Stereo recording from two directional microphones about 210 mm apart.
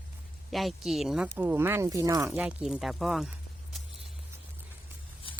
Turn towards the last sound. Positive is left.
turn(degrees=25)  # may be behind; listen again after turning